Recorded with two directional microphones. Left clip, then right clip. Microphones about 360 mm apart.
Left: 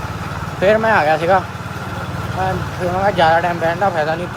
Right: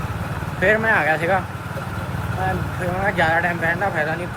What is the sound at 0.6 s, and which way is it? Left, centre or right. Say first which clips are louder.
Speech: left 4 dB; centre.